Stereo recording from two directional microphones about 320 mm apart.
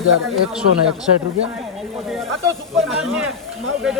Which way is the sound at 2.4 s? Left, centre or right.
Centre.